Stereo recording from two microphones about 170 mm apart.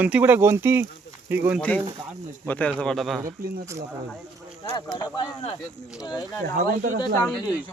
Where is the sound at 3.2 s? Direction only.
15° right (ahead or behind).